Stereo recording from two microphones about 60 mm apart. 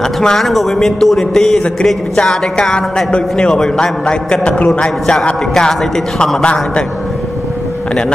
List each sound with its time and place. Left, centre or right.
0.2 s a man's voice: centre